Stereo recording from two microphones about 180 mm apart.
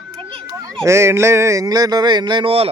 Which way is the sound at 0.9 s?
15° right (ahead or behind).